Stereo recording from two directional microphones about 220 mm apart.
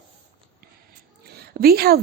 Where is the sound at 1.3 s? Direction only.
45° right (ahead or behind).